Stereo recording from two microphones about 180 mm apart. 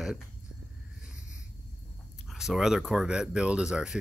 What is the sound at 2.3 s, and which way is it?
Speech, centre (ahead or behind).